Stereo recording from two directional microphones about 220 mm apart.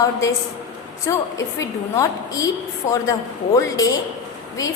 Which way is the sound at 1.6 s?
15° left (ahead or behind).